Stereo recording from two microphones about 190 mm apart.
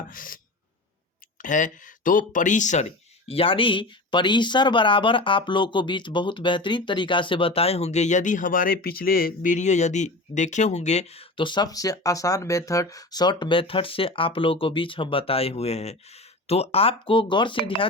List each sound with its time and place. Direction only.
0.1 s speech: 45° left (ahead or behind)
1.4 s speech: 45° left (ahead or behind); by 17.6 s 25° left (ahead or behind)